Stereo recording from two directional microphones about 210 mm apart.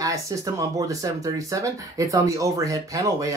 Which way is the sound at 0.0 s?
15° right (ahead or behind).